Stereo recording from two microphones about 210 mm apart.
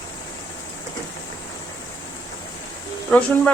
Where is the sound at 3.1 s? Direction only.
5° left (ahead or behind).